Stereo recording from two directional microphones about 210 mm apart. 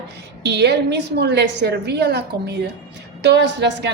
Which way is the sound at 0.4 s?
55° right (ahead or behind).